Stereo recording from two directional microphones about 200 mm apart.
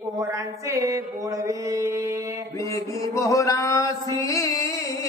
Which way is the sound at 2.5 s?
15° left (ahead or behind).